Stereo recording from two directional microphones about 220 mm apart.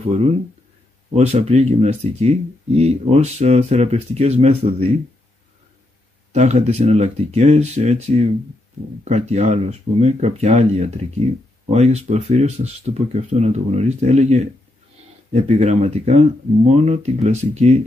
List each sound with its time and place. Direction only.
0.0 s speech: 30° right (ahead or behind)
6.3 s speech: 30° right (ahead or behind)